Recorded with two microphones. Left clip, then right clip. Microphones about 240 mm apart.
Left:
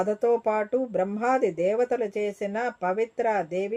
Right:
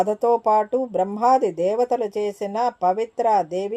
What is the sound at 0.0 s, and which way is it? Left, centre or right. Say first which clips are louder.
Speech: right 4 dB; centre.